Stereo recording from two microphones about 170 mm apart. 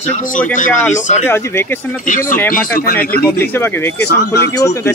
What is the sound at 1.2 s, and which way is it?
Speech, 15° left (ahead or behind).